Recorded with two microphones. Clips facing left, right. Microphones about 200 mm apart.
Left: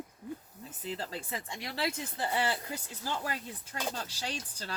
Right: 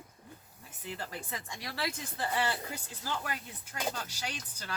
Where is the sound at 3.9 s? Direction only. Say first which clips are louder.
Left 2 dB; 30° left (ahead or behind).